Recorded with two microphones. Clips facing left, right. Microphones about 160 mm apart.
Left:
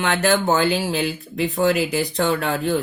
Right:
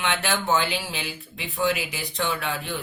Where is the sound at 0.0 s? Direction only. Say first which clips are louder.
Left 7 dB; 45° left (ahead or behind).